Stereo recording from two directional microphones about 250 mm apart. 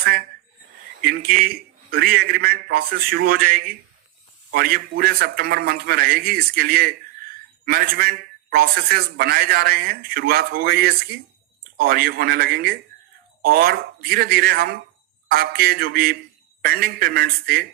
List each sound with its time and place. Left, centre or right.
0.0 s a man's voice: right